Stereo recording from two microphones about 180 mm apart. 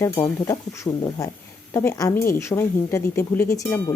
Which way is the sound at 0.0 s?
15° left (ahead or behind).